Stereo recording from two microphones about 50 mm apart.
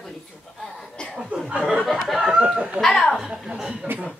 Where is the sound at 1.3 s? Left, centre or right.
Right.